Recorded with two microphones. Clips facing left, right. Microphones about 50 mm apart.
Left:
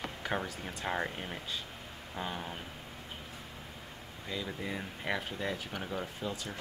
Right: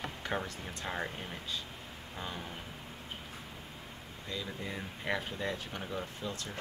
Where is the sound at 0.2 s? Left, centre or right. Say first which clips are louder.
Left 2 dB; centre.